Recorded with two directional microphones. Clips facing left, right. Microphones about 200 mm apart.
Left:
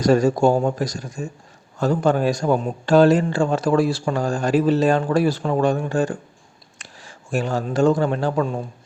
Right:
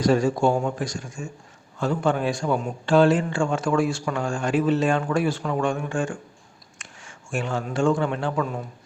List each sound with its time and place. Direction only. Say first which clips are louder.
0.0 s a man's voice: left 4 dB; 40° left (ahead or behind)